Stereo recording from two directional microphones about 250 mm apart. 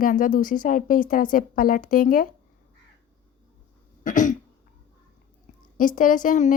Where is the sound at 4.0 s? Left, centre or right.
Left.